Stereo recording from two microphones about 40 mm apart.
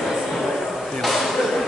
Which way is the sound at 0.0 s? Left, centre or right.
Centre.